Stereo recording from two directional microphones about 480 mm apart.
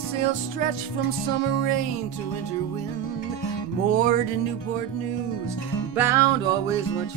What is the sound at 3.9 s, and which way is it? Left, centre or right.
Speech, centre.